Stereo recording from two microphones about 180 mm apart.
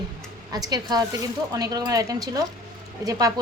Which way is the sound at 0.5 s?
20° right (ahead or behind).